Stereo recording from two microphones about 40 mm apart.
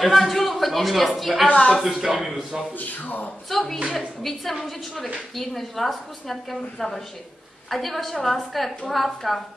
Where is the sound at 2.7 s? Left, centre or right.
Left.